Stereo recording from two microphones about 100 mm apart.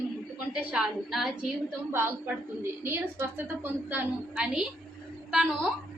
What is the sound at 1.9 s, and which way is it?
A woman's voice, 20° right (ahead or behind).